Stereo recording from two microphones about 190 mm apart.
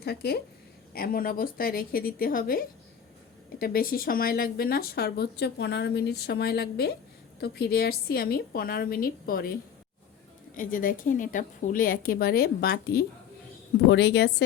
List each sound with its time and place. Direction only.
0.0 s a woman's voice: 55° left (ahead or behind)